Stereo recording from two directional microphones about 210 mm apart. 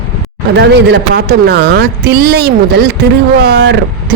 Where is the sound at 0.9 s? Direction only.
50° right (ahead or behind).